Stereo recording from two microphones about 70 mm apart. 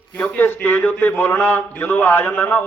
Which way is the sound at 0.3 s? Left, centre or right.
Left.